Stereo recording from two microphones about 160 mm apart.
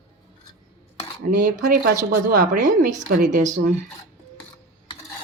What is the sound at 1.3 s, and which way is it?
A woman's voice, 60° right (ahead or behind).